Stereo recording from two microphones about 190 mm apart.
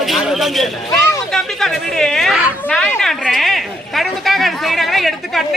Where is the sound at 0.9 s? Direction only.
15° left (ahead or behind).